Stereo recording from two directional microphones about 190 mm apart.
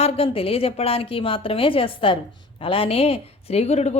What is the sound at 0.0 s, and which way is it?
A woman's voice, 30° left (ahead or behind).